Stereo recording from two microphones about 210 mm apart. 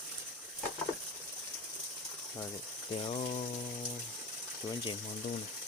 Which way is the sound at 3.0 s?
30° left (ahead or behind).